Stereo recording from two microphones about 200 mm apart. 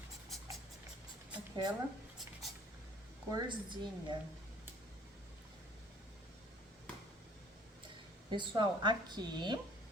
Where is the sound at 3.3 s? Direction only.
25° right (ahead or behind).